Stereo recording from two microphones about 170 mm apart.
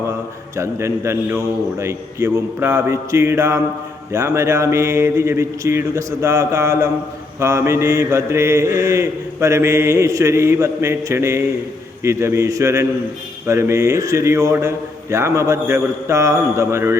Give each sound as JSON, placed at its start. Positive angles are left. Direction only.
{"t": 0.5, "sound": "mantra", "side_deg": -15}